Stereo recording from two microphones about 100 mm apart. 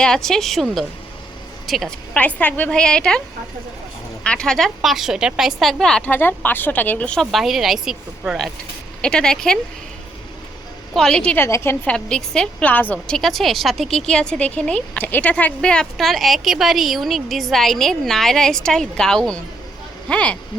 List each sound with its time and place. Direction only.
0.0 s a woman's voice: 5° left (ahead or behind)
2.1 s speech: 15° left (ahead or behind)
4.2 s a woman's voice: 10° left (ahead or behind)
6.1 s speech: 20° left (ahead or behind)
7.3 s a woman's voice: centre (ahead or behind)
9.0 s speech: 5° left (ahead or behind)
10.9 s speech: 5° left (ahead or behind)
11.3 s a woman's voice: 25° left (ahead or behind)
11.9 s a woman's voice: 5° left (ahead or behind)